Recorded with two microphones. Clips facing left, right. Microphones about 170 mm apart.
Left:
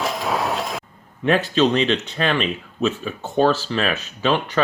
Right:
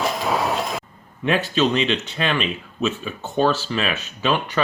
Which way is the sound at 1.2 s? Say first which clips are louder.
Left 2 dB; 35° left (ahead or behind).